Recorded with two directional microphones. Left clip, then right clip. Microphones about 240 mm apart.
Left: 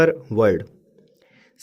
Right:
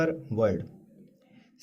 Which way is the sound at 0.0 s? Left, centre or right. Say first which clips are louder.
Left 9 dB; left.